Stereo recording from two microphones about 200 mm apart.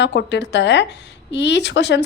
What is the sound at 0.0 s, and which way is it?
A woman's voice, 60° left (ahead or behind).